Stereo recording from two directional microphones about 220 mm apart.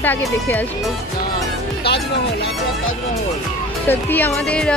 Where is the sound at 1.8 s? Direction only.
50° left (ahead or behind).